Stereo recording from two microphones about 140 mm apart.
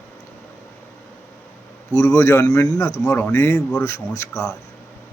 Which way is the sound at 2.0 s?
20° left (ahead or behind).